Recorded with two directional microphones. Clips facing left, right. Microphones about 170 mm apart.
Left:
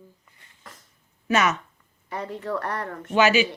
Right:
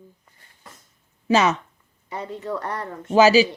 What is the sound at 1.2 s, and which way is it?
Speech, 30° right (ahead or behind).